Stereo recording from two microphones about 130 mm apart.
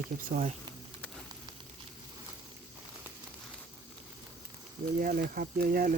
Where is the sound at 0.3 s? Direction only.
90° right.